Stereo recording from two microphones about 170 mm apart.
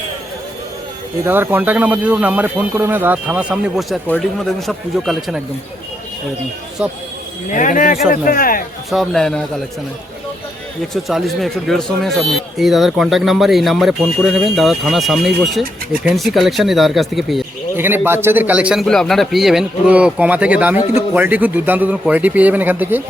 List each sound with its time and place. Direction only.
1.2 s a man's voice: 15° right (ahead or behind)
7.5 s speech: 50° left (ahead or behind)
8.9 s speech: centre (ahead or behind)
10.9 s speech: centre (ahead or behind)
17.7 s a man's voice: 10° right (ahead or behind)